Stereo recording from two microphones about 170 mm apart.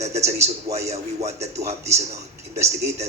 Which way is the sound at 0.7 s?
40° right (ahead or behind).